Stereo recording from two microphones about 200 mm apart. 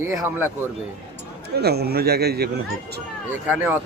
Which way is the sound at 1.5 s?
50° right (ahead or behind).